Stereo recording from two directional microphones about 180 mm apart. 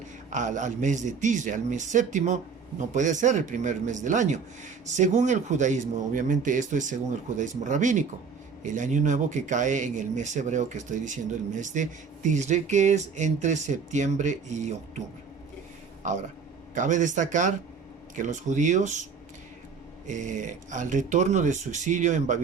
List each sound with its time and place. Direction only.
0.3 s speech: 45° right (ahead or behind)
16.0 s speech: 45° right (ahead or behind)
20.1 s speech: 45° right (ahead or behind)